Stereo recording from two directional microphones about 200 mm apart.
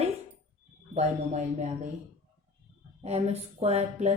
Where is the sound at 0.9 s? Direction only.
35° right (ahead or behind).